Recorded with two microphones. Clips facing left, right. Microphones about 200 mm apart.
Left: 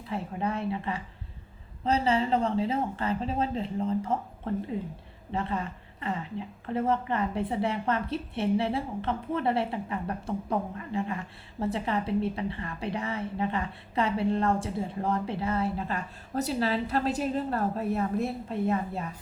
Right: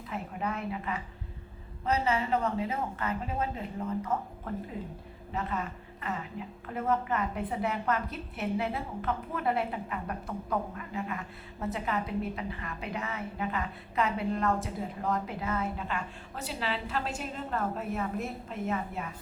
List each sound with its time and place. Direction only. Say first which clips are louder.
0.1 s a woman's voice: left 4 dB; 30° left (ahead or behind)